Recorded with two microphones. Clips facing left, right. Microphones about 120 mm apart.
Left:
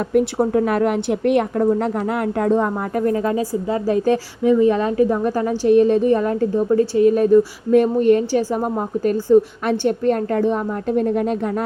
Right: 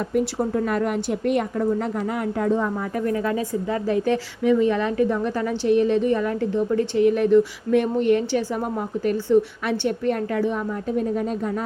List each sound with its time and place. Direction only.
0.1 s a woman's voice: 60° left (ahead or behind)
3.0 s a woman's voice: 35° left (ahead or behind); by 11.6 s 60° left (ahead or behind)